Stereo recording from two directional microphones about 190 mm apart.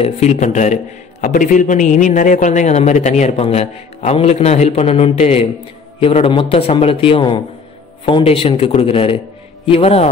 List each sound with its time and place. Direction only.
0.0 s a man's voice: 35° left (ahead or behind)